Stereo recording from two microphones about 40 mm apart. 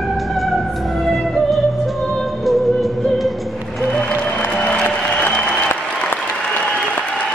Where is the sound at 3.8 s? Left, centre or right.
Left.